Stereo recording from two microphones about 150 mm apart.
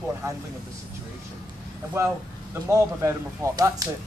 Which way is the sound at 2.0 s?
20° right (ahead or behind).